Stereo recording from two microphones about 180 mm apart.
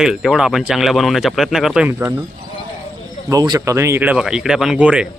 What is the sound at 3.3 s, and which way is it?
Speech, 20° right (ahead or behind).